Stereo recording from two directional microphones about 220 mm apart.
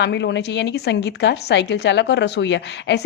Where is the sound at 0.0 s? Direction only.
50° left (ahead or behind).